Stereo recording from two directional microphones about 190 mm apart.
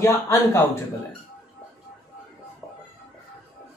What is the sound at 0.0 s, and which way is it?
Speech, 15° left (ahead or behind).